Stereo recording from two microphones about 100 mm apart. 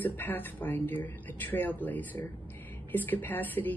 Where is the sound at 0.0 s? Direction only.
20° left (ahead or behind).